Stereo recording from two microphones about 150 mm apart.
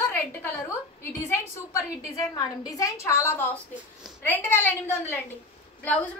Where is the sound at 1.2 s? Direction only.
20° left (ahead or behind).